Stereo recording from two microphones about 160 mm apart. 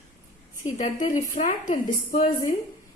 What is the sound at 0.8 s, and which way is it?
Speech, 50° left (ahead or behind).